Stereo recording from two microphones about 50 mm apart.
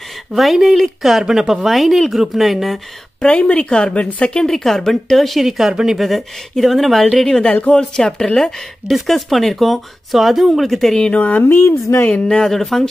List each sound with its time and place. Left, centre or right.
0.4 s speech: centre
3.2 s speech: left
4.4 s speech: centre
8.8 s speech: centre
11.1 s speech: left
12.3 s speech: centre